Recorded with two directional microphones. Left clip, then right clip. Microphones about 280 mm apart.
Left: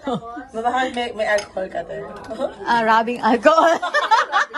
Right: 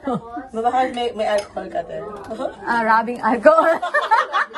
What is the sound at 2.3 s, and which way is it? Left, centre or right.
Chuckle, centre.